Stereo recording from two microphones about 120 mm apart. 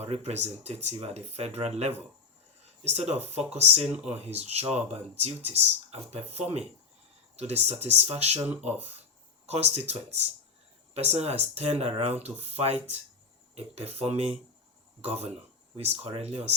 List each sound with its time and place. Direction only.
0.0 s speech: 60° right (ahead or behind)
9.5 s speech: 65° right (ahead or behind)